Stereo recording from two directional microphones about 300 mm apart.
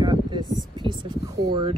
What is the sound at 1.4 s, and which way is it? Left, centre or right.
Speech, centre.